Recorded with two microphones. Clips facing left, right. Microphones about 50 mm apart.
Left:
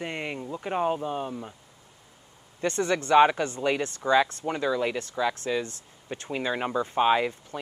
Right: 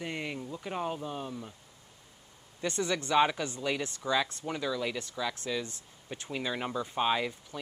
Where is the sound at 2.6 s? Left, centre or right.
Left.